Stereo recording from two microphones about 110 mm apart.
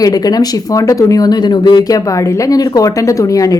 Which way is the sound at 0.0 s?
35° left (ahead or behind).